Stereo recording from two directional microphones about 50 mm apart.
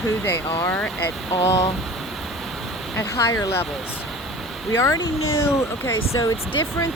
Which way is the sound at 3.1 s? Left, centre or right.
Left.